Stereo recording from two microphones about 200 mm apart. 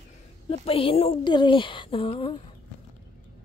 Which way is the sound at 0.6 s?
30° left (ahead or behind).